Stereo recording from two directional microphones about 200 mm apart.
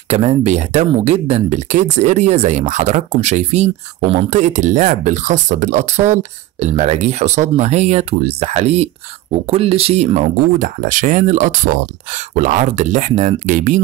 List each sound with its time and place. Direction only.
0.1 s speech: 30° right (ahead or behind)